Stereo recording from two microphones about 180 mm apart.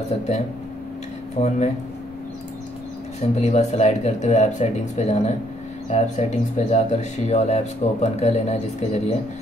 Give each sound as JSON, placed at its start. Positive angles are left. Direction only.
{"t": 1.3, "sound": "speech", "side_deg": 40}
{"t": 3.2, "sound": "speech", "side_deg": 35}